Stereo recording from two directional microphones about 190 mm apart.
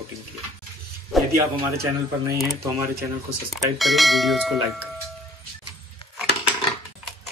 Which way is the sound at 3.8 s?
Centre (ahead or behind).